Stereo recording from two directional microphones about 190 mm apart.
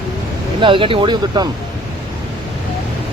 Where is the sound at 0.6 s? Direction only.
25° right (ahead or behind).